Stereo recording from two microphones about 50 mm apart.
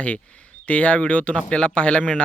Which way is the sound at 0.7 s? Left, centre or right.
Left.